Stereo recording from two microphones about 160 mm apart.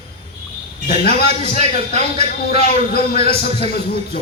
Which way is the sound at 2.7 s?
70° left (ahead or behind).